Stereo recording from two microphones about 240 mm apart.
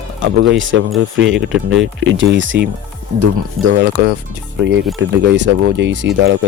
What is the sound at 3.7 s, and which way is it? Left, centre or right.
Speech, right.